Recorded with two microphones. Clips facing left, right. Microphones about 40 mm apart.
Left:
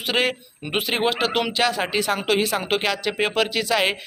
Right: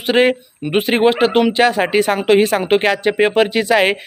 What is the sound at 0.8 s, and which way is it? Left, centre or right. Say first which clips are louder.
A man's voice: right 9 dB; right.